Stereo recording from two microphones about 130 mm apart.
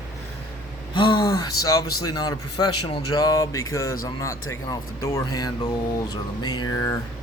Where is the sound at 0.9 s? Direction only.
35° left (ahead or behind).